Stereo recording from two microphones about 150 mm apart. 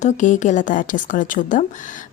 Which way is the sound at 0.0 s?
55° left (ahead or behind).